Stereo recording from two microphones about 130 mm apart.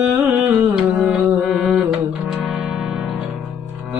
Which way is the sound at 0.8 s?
5° right (ahead or behind).